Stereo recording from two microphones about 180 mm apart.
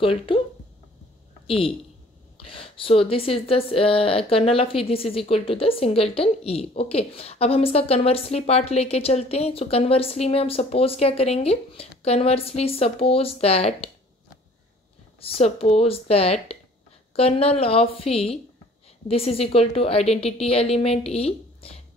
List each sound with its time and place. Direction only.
0.0 s speech: 30° left (ahead or behind)
2.4 s speech: 30° left (ahead or behind)
15.1 s speech: 30° left (ahead or behind)